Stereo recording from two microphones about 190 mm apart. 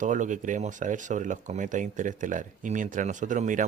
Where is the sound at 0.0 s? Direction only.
40° right (ahead or behind).